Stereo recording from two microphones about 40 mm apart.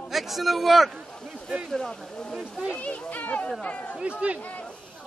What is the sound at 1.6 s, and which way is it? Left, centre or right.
Speech, centre.